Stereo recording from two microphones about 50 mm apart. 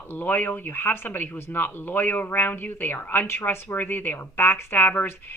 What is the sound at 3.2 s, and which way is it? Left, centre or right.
Speech, left.